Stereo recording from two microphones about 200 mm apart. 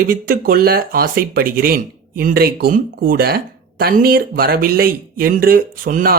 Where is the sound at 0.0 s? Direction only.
45° right (ahead or behind).